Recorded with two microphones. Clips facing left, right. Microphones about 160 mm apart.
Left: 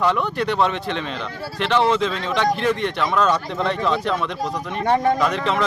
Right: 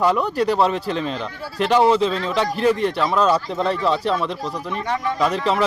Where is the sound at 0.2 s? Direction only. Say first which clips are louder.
Right 2 dB; 35° right (ahead or behind).